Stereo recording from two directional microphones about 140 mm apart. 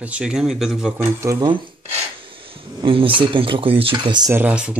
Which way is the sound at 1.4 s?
35° right (ahead or behind).